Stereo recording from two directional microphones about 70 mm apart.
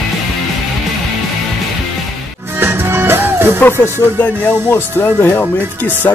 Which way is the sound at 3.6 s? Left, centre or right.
Left.